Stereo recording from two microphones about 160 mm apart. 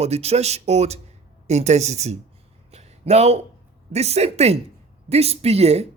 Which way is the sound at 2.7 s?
40° right (ahead or behind).